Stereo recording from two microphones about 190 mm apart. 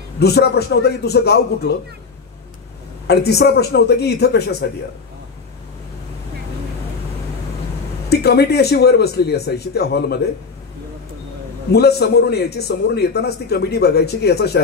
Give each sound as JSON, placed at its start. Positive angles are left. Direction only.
{"t": 0.2, "sound": "a man's voice", "side_deg": 60}
{"t": 3.1, "sound": "a man's voice", "side_deg": 60}
{"t": 8.1, "sound": "a man's voice", "side_deg": 60}
{"t": 11.7, "sound": "a man's voice", "side_deg": 60}